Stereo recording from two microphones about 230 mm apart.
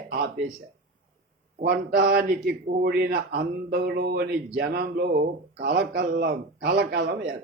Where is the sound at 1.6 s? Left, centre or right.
Right.